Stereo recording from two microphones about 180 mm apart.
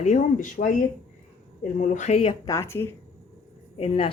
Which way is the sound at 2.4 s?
15° left (ahead or behind).